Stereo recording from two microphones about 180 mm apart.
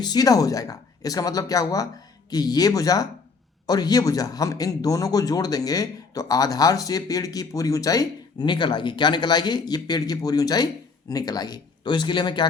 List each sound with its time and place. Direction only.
0.0 s a man's voice: 20° left (ahead or behind)